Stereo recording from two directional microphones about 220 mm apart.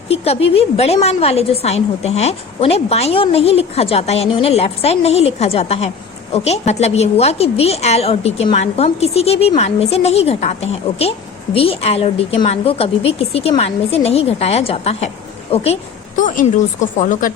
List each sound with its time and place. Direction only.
0.1 s a woman's voice: 25° left (ahead or behind)